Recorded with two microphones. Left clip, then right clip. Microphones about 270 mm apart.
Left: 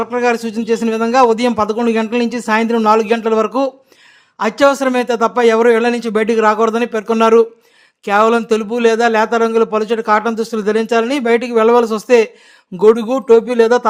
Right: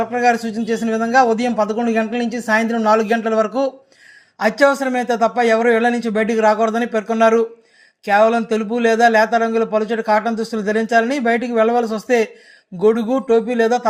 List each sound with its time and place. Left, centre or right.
0.0 s a man's voice: centre